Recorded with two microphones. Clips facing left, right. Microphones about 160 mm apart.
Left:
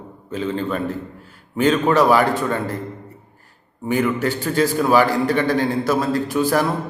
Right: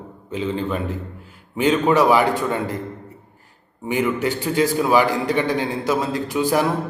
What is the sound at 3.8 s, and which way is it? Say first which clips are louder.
A man's voice: left 1 dB; 15° right (ahead or behind).